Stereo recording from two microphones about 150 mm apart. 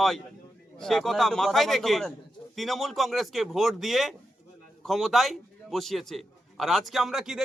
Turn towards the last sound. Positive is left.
turn(degrees=-5)  # may be behind; listen again after turning